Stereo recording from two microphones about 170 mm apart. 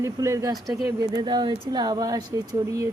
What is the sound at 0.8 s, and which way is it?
Speech, 20° right (ahead or behind).